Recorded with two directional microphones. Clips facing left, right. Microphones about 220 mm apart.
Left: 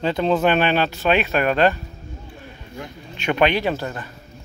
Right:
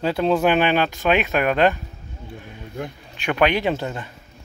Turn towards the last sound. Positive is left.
turn(degrees=-20)  # may be behind; listen again after turning